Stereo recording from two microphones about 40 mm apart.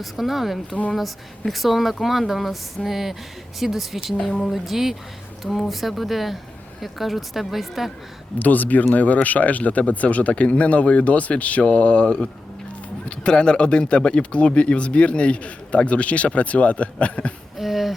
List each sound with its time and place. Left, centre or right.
0.0 s speech: centre
8.4 s speech: left
17.6 s speech: centre